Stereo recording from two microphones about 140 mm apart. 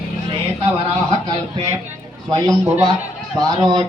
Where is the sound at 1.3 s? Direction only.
35° right (ahead or behind).